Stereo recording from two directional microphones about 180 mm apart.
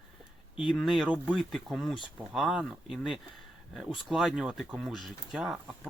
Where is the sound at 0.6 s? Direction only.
Centre (ahead or behind).